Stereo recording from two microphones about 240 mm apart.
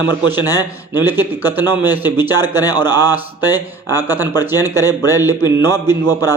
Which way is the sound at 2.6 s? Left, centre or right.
Centre.